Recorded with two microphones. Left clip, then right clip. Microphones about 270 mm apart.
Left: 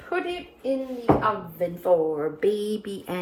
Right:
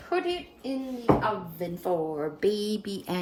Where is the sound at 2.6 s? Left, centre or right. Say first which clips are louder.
Left 3 dB; left.